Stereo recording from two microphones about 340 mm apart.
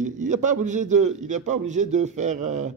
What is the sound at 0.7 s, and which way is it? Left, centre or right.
A man's voice, right.